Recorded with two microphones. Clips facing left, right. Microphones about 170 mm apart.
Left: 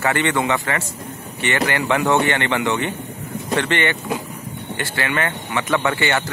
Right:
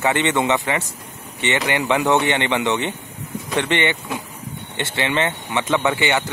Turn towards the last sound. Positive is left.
turn(degrees=-15)  # may be behind; listen again after turning